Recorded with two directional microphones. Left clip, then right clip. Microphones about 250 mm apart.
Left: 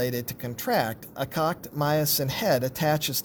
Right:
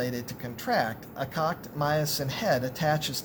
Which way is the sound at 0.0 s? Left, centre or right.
Left.